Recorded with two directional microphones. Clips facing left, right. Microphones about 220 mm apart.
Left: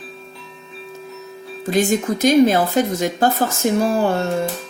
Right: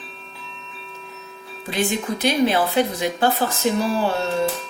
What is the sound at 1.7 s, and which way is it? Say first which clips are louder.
A woman's voice: left 5 dB; 45° left (ahead or behind).